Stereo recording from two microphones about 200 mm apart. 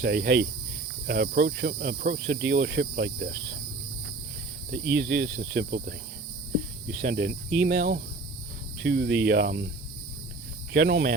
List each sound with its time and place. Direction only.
0.0 s insect: 60° right (ahead or behind)
1.0 s cricket: 55° right (ahead or behind)
2.5 s insect: 55° right (ahead or behind)
4.7 s cricket: 70° right (ahead or behind)
5.0 s cricket: 45° right (ahead or behind)
7.0 s cricket: 50° right (ahead or behind)
10.7 s speech: 55° right (ahead or behind)